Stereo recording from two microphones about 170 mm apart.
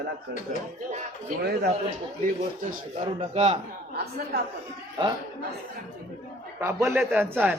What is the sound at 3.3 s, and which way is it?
Speech, 40° right (ahead or behind).